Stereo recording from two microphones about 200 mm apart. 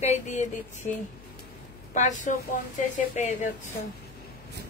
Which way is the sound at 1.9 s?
40° left (ahead or behind).